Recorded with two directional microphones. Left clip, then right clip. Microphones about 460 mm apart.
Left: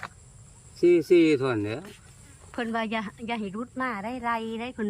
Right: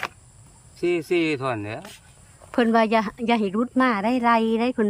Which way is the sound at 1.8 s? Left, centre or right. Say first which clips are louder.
Right 3 dB; centre.